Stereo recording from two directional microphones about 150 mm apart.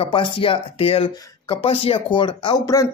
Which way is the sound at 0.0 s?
35° left (ahead or behind).